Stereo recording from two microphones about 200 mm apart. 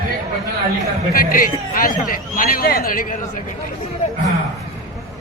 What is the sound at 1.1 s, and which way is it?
A man's voice, 45° left (ahead or behind).